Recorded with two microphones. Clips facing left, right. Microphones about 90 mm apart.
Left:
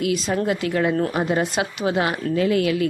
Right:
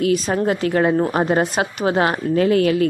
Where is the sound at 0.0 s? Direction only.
45° right (ahead or behind).